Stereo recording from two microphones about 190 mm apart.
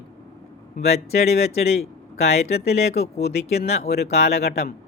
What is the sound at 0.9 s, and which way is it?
Speech, 35° left (ahead or behind).